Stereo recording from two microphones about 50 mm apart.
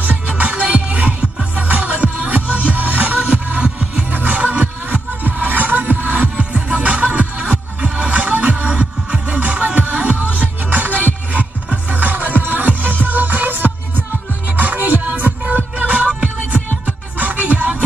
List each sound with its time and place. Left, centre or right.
0.0 s music: right
2.4 s music: left
2.7 s music: right
10.2 s music: left
11.3 s music: right